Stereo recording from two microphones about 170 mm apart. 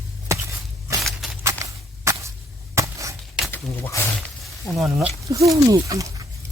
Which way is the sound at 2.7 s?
20° right (ahead or behind).